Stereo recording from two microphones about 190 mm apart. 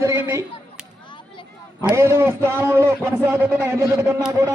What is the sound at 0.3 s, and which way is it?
A man's voice, 10° right (ahead or behind).